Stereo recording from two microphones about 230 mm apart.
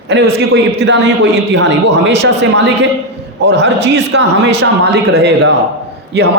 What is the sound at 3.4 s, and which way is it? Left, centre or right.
A man's voice, right.